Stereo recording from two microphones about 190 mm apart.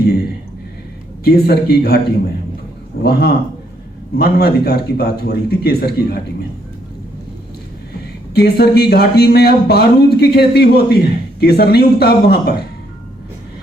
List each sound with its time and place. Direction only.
1.2 s speech: 55° left (ahead or behind)
8.4 s speech: 55° left (ahead or behind)